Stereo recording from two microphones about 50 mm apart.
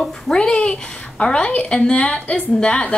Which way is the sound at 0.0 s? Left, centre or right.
Centre.